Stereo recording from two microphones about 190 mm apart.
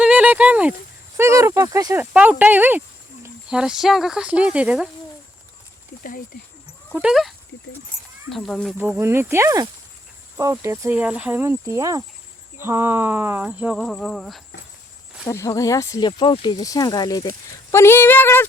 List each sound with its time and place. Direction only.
0.0 s a sound: 5° right (ahead or behind)
1.1 s speech: 15° right (ahead or behind)
6.0 s speech: 50° left (ahead or behind)
6.9 s speech: 5° right (ahead or behind)
8.8 s speech: 10° right (ahead or behind)
15.3 s speech: 15° left (ahead or behind)